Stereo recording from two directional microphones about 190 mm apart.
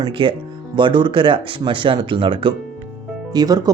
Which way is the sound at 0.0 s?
25° right (ahead or behind).